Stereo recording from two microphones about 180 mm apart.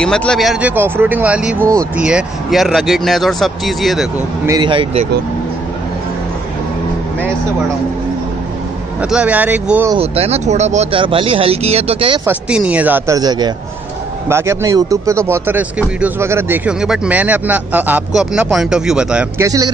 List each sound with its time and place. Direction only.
0.0 s speech: 5° left (ahead or behind)
4.5 s speech: 25° right (ahead or behind)
9.1 s speech: 10° right (ahead or behind)
9.9 s speech: 35° right (ahead or behind)
12.3 s speech: 5° right (ahead or behind)
19.3 s speech: 20° right (ahead or behind)